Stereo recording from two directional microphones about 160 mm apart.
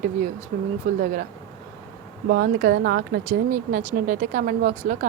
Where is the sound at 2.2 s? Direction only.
65° right (ahead or behind).